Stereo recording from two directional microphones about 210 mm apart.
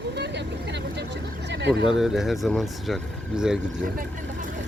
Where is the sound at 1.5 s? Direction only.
55° right (ahead or behind).